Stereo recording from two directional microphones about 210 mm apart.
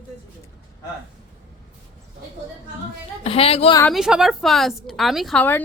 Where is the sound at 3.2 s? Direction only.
30° left (ahead or behind).